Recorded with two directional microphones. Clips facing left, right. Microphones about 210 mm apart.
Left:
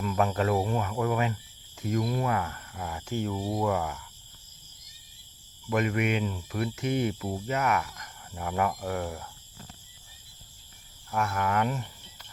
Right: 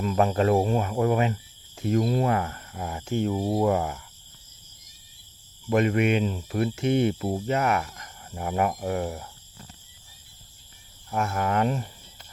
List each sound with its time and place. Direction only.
0.0 s speech: 25° right (ahead or behind)
5.6 s speech: 30° right (ahead or behind)
11.1 s speech: 25° right (ahead or behind)